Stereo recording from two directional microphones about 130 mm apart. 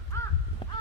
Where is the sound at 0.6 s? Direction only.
40° left (ahead or behind).